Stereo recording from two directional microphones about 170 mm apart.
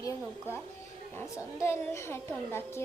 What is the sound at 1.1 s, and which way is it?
A woman's voice, 15° left (ahead or behind).